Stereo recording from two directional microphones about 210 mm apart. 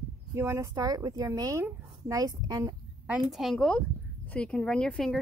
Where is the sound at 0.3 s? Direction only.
15° right (ahead or behind).